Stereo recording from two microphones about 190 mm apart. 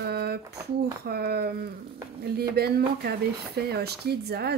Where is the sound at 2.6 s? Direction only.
55° right (ahead or behind).